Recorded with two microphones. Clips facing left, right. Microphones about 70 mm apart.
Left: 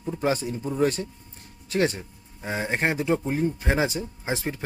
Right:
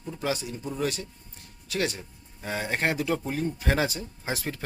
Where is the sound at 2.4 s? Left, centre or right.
Left.